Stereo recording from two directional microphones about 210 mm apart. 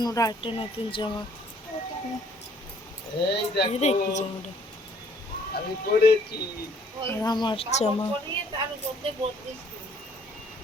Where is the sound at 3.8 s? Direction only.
30° left (ahead or behind).